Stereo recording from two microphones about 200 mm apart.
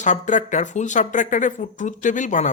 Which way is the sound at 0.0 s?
40° left (ahead or behind).